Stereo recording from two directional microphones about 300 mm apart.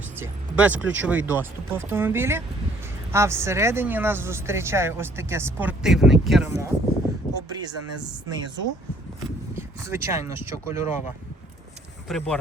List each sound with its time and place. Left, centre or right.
0.2 s speech: centre
7.2 s a sound: centre
7.6 s speech: centre
9.6 s speech: centre
12.0 s speech: centre